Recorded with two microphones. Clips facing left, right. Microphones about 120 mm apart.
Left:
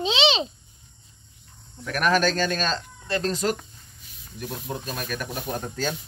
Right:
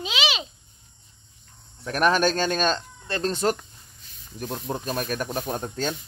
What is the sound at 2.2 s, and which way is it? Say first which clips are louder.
Speech: right 1 dB; 20° right (ahead or behind).